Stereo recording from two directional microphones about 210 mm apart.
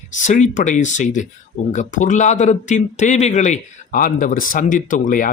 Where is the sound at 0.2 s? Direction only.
35° left (ahead or behind).